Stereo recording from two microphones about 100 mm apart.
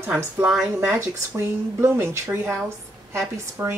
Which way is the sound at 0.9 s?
25° right (ahead or behind).